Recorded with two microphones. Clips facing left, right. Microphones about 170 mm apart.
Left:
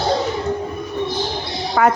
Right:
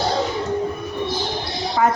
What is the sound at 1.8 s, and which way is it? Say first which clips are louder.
Speech: left 3 dB; 75° left (ahead or behind).